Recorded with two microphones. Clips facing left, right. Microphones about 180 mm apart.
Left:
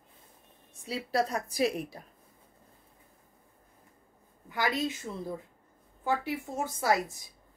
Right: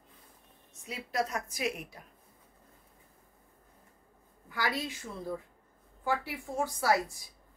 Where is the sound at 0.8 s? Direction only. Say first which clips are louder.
Left 4 dB; 35° left (ahead or behind).